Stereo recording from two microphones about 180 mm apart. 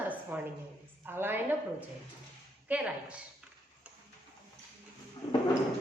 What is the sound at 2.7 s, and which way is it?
Speech, 5° right (ahead or behind).